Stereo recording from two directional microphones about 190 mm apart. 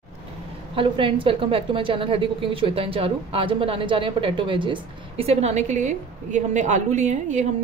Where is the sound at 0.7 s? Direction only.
25° right (ahead or behind).